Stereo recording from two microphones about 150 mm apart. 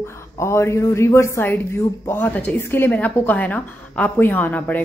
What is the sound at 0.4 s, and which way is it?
A woman's voice, 20° left (ahead or behind).